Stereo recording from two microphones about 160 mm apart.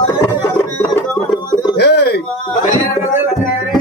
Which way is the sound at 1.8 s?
90° left.